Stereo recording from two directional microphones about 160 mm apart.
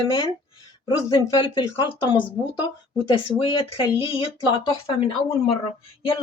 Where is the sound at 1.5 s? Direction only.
30° left (ahead or behind).